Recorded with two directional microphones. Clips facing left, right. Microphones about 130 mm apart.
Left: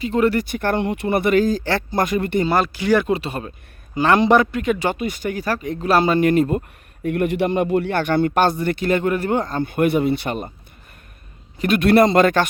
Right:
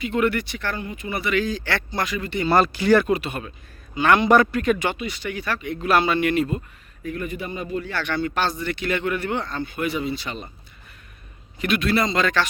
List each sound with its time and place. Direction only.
0.0 s speech: 35° left (ahead or behind)
0.4 s a man's voice: 50° left (ahead or behind)
0.8 s a man's voice: 70° left (ahead or behind); by 2.4 s 50° left (ahead or behind)
2.5 s speech: 10° left (ahead or behind)
3.1 s speech: 30° left (ahead or behind)
4.3 s speech: 20° left (ahead or behind)
4.8 s speech: 45° left (ahead or behind)
7.0 s a man's voice: 65° left (ahead or behind)
11.8 s a man's voice: 60° left (ahead or behind)